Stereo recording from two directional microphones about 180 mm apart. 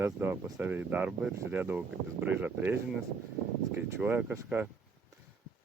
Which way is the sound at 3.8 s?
10° right (ahead or behind).